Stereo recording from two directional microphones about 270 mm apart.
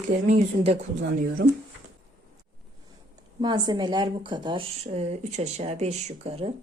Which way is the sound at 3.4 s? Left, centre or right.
Centre.